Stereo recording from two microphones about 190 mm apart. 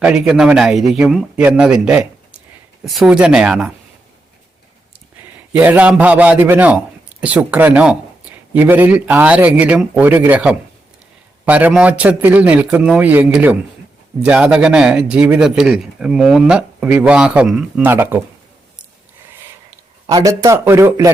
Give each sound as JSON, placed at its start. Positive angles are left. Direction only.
{"t": 0.0, "sound": "speech", "side_deg": -5}
{"t": 5.5, "sound": "a man's voice", "side_deg": -10}
{"t": 20.1, "sound": "a man's voice", "side_deg": -20}